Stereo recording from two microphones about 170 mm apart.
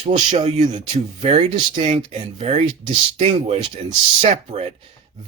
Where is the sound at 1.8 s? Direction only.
30° right (ahead or behind).